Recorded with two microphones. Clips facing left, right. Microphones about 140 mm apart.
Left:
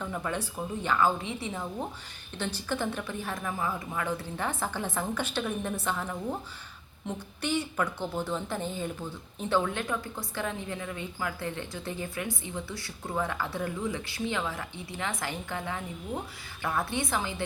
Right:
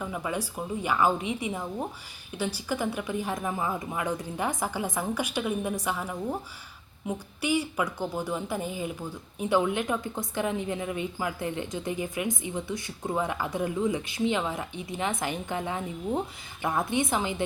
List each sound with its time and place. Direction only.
0.0 s a woman's voice: 10° right (ahead or behind)